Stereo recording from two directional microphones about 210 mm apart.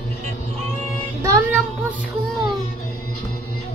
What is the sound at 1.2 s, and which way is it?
Child singing, 15° right (ahead or behind).